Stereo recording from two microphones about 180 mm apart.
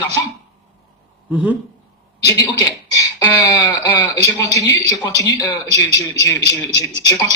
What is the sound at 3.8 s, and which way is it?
A man's voice, 10° left (ahead or behind).